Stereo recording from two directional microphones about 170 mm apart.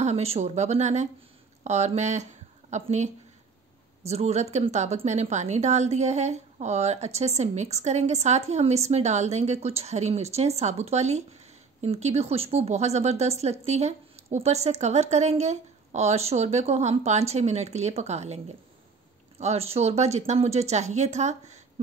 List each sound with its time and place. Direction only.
0.0 s a woman's voice: 40° right (ahead or behind)
4.1 s a woman's voice: 40° right (ahead or behind)